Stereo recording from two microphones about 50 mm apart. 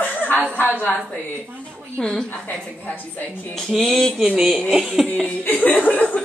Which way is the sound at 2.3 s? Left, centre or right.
Left.